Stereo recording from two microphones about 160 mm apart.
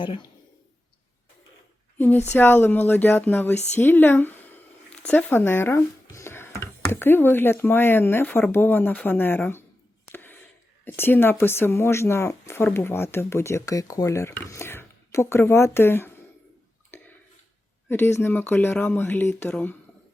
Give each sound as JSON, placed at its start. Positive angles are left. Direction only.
{"t": 0.0, "sound": "a man's voice", "side_deg": 30}
{"t": 2.3, "sound": "speech", "side_deg": 10}
{"t": 10.1, "sound": "a sound", "side_deg": 15}
{"t": 10.8, "sound": "speech", "side_deg": 15}
{"t": 17.8, "sound": "speech", "side_deg": 15}